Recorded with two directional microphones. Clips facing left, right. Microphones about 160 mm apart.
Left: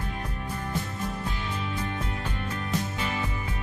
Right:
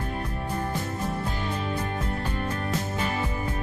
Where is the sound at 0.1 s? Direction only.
35° right (ahead or behind).